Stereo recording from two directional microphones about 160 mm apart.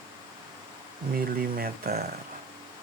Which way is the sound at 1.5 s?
70° right (ahead or behind).